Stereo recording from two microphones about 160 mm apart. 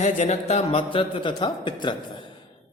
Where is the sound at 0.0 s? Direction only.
50° left (ahead or behind).